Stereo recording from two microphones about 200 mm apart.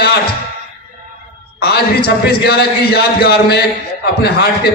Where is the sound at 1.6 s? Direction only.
50° left (ahead or behind).